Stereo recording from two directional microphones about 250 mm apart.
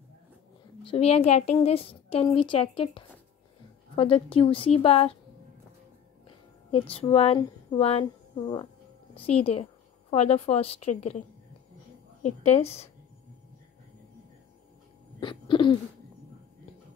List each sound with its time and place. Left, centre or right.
0.8 s speech: left
6.7 s speech: left
15.1 s a sound: centre